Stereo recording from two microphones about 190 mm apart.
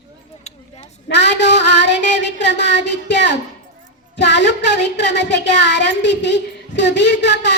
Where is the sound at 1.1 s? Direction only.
65° left (ahead or behind).